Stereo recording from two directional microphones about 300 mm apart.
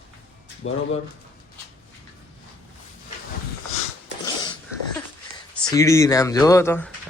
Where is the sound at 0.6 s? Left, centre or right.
Left.